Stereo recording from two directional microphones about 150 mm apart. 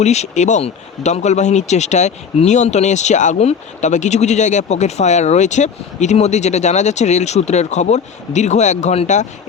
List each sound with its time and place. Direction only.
0.0 s speech: 45° left (ahead or behind)